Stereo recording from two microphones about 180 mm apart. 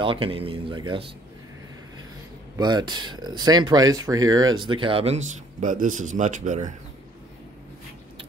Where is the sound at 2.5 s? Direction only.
25° right (ahead or behind); by 6.7 s 45° right (ahead or behind).